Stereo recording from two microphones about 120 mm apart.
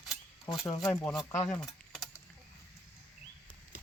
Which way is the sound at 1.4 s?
5° left (ahead or behind).